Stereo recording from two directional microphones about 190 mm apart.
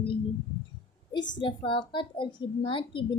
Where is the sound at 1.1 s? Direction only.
20° left (ahead or behind).